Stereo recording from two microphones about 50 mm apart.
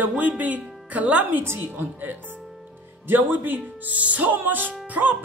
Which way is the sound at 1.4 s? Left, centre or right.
Right.